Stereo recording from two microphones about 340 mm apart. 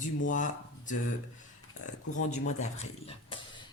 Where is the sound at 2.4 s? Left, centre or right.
Centre.